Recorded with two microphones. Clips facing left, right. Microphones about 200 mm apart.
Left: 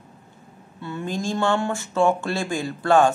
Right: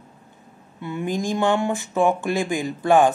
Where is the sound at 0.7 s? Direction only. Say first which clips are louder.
Right 3 dB; 15° right (ahead or behind).